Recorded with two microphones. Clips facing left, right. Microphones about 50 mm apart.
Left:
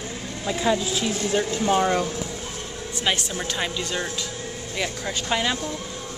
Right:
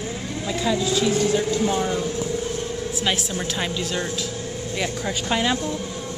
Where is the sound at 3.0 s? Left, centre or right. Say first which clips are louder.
Left 1 dB; centre.